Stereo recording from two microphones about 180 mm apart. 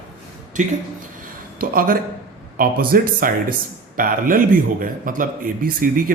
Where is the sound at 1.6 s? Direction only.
50° right (ahead or behind).